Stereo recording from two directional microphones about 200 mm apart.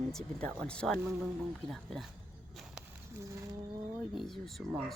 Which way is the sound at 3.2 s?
15° right (ahead or behind).